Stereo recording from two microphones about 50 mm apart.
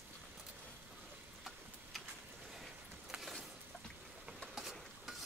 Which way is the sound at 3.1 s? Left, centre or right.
Centre.